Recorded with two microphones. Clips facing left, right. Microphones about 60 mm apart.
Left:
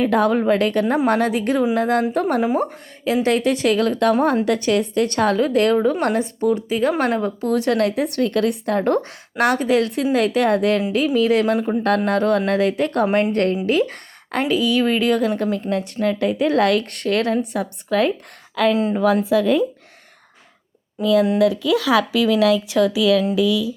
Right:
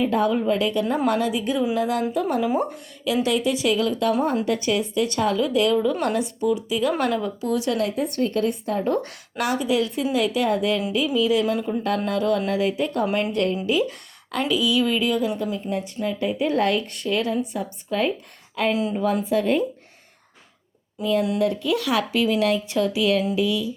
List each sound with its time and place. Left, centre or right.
0.0 s speech: left
1.7 s a woman's voice: left
2.4 s speech: left
3.2 s a woman's voice: left
9.4 s a woman's voice: left
11.5 s speech: left
11.8 s a woman's voice: left
13.3 s a woman's voice: left
18.5 s speech: left
21.0 s speech: left